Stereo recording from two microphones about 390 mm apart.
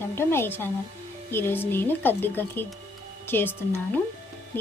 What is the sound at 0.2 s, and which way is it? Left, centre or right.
Speech, centre.